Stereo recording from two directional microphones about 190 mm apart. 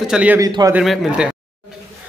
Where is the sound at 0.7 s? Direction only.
5° right (ahead or behind).